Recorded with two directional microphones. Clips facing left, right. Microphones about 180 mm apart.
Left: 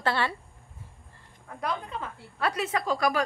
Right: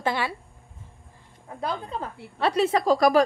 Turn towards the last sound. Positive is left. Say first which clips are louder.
# right 7 dB
turn(degrees=-40)  # may be behind; listen again after turning